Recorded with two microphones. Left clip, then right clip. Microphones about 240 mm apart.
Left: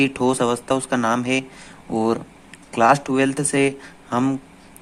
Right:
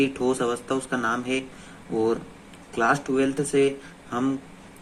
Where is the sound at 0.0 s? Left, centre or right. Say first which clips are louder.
Left 4 dB; left.